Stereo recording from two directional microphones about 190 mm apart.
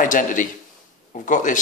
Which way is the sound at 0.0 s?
45° left (ahead or behind).